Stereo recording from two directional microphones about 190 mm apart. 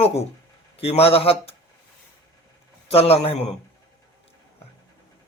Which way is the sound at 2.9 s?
30° left (ahead or behind).